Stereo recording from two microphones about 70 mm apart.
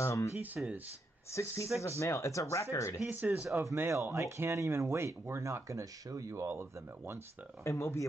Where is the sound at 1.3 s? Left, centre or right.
Left.